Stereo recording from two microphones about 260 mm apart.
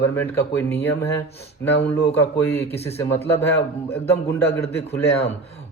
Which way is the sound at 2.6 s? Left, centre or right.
Left.